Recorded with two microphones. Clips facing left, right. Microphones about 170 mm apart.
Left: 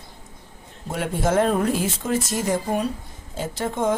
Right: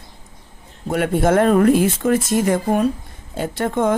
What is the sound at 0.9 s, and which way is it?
Speech, 60° right (ahead or behind).